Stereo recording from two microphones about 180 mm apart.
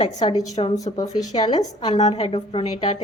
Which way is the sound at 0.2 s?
25° left (ahead or behind).